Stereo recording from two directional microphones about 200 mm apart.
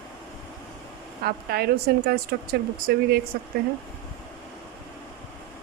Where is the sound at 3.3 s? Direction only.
50° right (ahead or behind).